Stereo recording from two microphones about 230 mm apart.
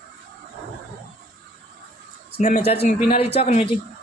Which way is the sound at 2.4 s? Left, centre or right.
Left.